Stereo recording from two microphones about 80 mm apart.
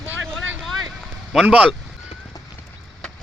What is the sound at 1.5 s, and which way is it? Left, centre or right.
Speech, centre.